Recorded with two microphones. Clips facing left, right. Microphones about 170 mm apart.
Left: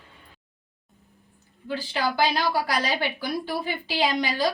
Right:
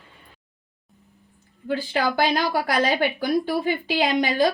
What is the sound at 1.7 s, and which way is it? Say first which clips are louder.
A woman's voice: right 4 dB; 50° right (ahead or behind).